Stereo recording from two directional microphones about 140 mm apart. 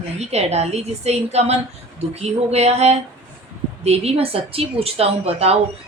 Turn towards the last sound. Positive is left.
turn(degrees=-45)  # may be behind; listen again after turning